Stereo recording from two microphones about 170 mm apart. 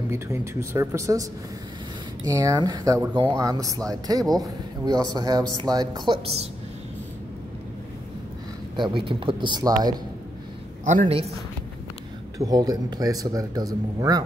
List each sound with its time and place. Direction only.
0.1 s speech: 15° right (ahead or behind)
2.2 s a man's voice: 20° right (ahead or behind)
8.7 s a man's voice: 30° right (ahead or behind)
10.9 s a man's voice: 45° right (ahead or behind)
12.4 s a man's voice: 20° right (ahead or behind)